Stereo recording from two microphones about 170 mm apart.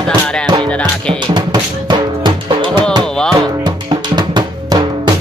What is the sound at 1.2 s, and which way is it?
Drum, 25° right (ahead or behind).